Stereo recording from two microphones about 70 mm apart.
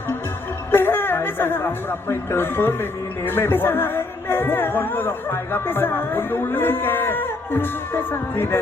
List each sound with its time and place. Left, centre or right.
0.7 s speech: left